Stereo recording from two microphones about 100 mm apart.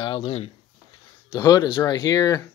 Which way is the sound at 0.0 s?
55° left (ahead or behind).